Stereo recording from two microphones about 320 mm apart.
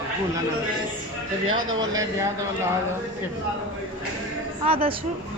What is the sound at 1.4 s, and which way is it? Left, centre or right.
Speech, right.